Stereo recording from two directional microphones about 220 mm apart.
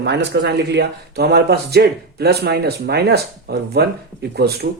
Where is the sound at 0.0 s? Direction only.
50° right (ahead or behind).